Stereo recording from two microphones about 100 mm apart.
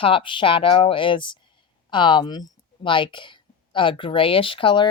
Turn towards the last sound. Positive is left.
turn(degrees=55)  # may be behind; listen again after turning